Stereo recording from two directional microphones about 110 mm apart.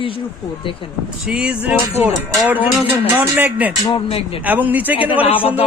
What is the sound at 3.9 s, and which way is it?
Speech, 60° left (ahead or behind).